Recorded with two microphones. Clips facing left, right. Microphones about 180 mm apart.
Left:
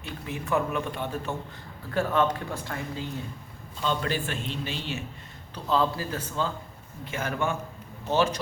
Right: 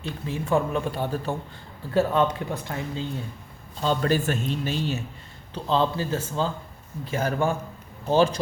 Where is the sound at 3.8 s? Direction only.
40° right (ahead or behind).